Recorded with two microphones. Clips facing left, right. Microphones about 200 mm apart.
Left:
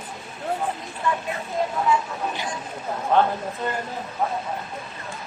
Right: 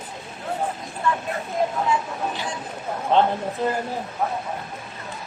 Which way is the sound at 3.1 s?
25° right (ahead or behind).